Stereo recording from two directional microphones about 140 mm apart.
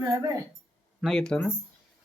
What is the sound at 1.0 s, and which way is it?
Speech, 5° left (ahead or behind).